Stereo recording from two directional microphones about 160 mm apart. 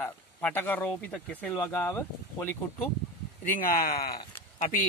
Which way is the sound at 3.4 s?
60° left (ahead or behind).